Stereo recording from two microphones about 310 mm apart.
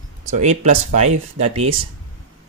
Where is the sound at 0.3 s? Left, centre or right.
Right.